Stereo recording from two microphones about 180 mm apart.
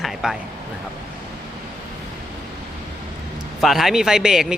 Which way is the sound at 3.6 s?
Centre (ahead or behind).